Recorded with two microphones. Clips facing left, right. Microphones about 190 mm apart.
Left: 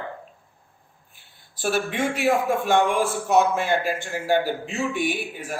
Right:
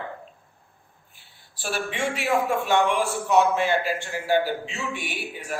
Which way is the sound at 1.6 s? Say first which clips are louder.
Left 4 dB; 45° left (ahead or behind).